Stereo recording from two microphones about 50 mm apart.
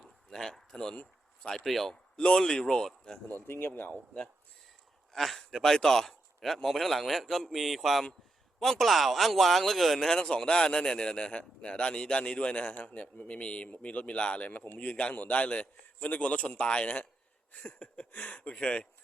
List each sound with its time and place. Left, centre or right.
0.3 s speech: centre
2.1 s speech: centre
3.3 s a man's voice: left
5.1 s a man's voice: centre; by 17.1 s left
17.5 s a sound: left
18.1 s a man's voice: left